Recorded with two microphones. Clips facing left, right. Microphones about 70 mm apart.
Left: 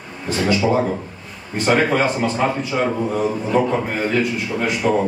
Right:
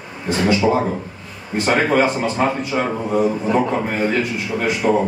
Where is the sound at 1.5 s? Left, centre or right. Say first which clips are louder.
Right 1 dB; centre.